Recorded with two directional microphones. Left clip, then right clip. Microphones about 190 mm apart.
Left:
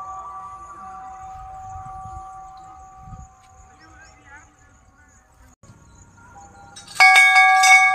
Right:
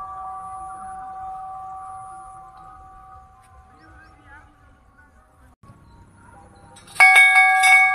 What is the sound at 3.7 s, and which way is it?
Music, 55° right (ahead or behind).